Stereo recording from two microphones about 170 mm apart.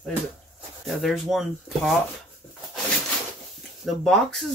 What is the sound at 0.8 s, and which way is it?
Speech, centre (ahead or behind).